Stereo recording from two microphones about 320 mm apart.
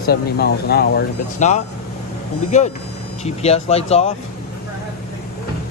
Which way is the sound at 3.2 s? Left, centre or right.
Centre.